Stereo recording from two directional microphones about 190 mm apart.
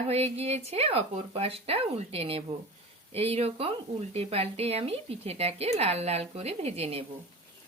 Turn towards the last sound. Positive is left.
turn(degrees=-30)  # may be behind; listen again after turning